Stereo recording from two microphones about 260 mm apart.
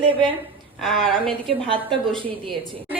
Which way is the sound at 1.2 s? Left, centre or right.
Centre.